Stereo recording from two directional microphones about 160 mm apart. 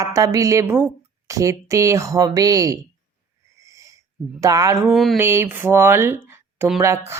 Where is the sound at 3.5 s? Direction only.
20° right (ahead or behind).